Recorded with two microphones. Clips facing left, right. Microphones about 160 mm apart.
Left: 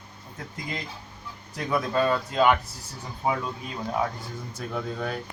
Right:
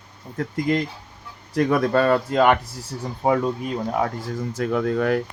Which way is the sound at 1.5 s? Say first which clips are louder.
Right 7 dB; 65° right (ahead or behind).